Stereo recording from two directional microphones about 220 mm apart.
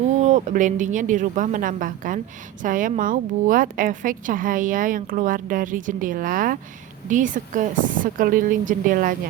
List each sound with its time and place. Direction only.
0.2 s a woman's voice: 30° right (ahead or behind)